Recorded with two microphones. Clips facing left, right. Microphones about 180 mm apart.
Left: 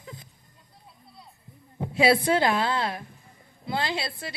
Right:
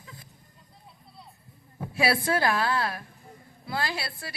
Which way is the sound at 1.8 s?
20° left (ahead or behind).